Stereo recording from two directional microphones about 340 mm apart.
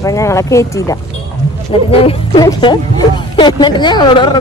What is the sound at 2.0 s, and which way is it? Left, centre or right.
Speech, centre.